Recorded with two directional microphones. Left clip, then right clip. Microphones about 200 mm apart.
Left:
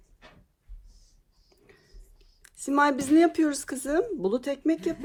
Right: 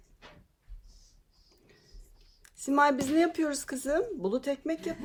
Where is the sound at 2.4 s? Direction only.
45° left (ahead or behind).